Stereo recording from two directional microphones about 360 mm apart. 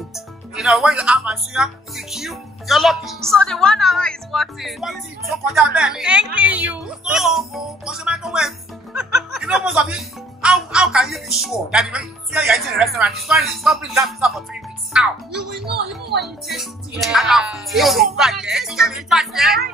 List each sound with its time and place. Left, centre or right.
0.1 s a woman's voice: centre
15.6 s speech: right
16.4 s a woman's voice: centre